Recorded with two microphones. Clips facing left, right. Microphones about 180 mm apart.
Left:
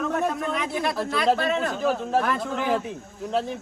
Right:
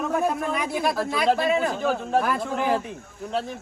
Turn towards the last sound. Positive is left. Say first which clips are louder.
# left 2 dB
turn(degrees=0)  # may be behind; listen again after turning